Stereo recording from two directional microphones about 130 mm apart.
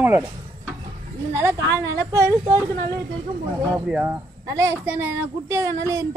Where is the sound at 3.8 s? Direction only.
15° right (ahead or behind).